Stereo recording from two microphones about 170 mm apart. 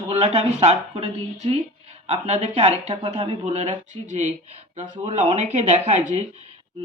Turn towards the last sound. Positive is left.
turn(degrees=-40)  # may be behind; listen again after turning